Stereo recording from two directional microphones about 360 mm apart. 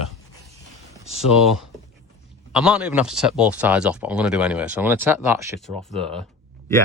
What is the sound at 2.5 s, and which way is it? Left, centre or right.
Speech, centre.